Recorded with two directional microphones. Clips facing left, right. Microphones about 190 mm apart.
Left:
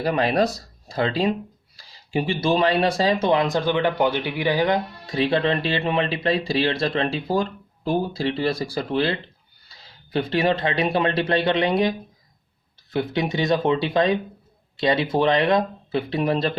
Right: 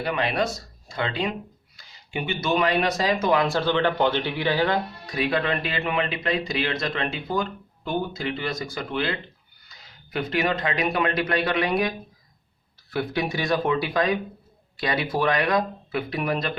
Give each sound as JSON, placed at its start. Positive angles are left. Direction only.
{"t": 0.0, "sound": "speech", "side_deg": 35}